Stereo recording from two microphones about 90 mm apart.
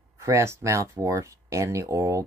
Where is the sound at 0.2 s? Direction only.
30° right (ahead or behind).